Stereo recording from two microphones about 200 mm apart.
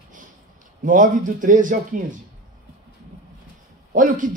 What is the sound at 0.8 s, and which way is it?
A man's voice, 40° right (ahead or behind).